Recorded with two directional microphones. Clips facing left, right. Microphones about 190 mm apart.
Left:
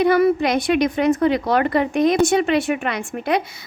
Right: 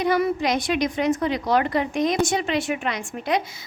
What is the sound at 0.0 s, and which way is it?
A woman's voice, 55° left (ahead or behind).